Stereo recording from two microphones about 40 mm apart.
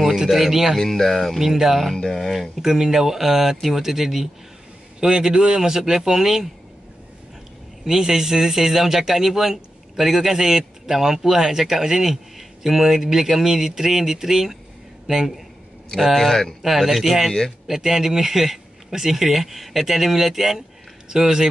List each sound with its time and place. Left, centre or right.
0.3 s speech: centre
0.7 s speech: centre
1.4 s speech: centre
7.8 s speech: centre